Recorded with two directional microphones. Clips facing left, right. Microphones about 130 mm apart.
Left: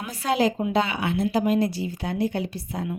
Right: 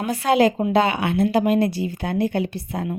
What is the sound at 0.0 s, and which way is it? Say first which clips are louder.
A woman's voice: right 5 dB; 65° right (ahead or behind).